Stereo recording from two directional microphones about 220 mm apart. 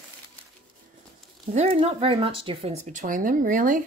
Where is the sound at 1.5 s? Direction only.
25° right (ahead or behind).